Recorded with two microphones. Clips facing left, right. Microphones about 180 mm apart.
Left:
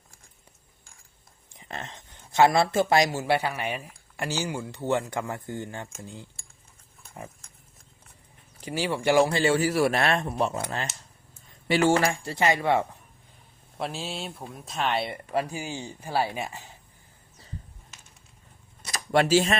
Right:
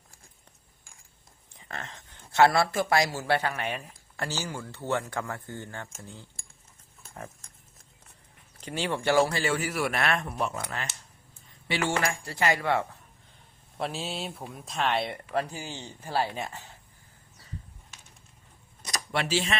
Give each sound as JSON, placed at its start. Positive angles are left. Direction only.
{"t": 1.5, "sound": "speech", "side_deg": 20}
{"t": 8.6, "sound": "speech", "side_deg": 10}
{"t": 9.3, "sound": "speech", "side_deg": 30}
{"t": 13.7, "sound": "speech", "side_deg": 0}
{"t": 19.1, "sound": "speech", "side_deg": 45}